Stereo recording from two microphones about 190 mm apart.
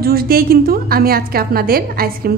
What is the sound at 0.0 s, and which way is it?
A woman's voice, 55° right (ahead or behind).